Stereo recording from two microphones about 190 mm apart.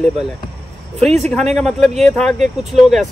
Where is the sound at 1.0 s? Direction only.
35° right (ahead or behind).